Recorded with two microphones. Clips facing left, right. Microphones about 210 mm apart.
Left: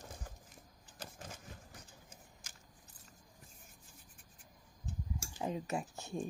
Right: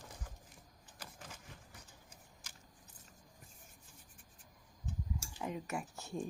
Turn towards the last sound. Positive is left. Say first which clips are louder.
# left 1 dB
turn(degrees=20)  # may be behind; listen again after turning